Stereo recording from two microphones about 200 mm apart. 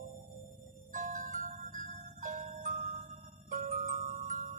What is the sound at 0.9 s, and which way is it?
Music, 40° right (ahead or behind).